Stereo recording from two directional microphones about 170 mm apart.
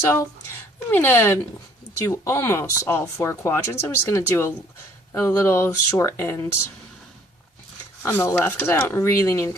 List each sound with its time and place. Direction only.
0.9 s speech: 10° left (ahead or behind)
8.0 s speech: 15° left (ahead or behind)